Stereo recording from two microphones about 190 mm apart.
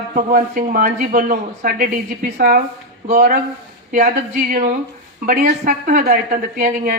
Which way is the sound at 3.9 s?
45° right (ahead or behind).